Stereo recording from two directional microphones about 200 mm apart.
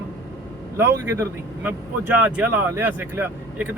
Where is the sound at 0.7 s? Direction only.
10° right (ahead or behind).